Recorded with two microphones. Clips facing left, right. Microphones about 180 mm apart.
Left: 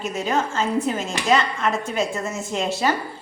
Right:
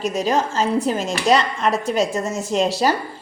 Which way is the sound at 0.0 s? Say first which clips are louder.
Right 3 dB; 35° right (ahead or behind).